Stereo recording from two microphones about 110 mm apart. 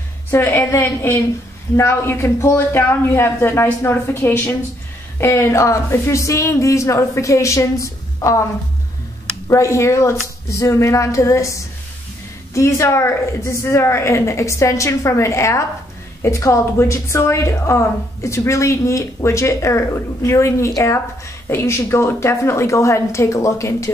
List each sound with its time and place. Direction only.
0.3 s a woman's voice: 20° left (ahead or behind)
9.5 s a woman's voice: 25° left (ahead or behind)